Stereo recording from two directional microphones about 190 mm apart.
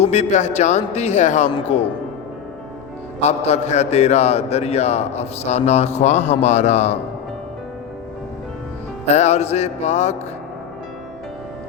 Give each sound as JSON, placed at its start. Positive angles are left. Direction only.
{"t": 0.0, "sound": "a man's voice", "side_deg": 35}
{"t": 3.2, "sound": "a man's voice", "side_deg": 35}
{"t": 9.1, "sound": "a man's voice", "side_deg": 35}